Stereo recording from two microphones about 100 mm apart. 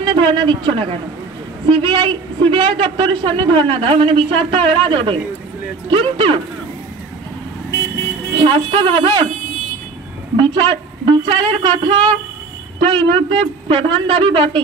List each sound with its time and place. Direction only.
0.0 s a man's voice: 55° right (ahead or behind)
8.4 s a man's voice: 60° right (ahead or behind)
10.3 s a woman's voice: 50° right (ahead or behind)